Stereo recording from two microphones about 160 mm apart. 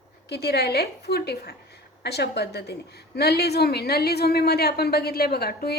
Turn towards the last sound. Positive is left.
turn(degrees=85)